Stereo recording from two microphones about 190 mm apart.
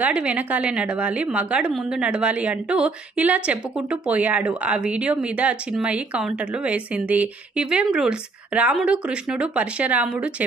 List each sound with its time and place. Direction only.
0.0 s a woman's voice: 5° right (ahead or behind)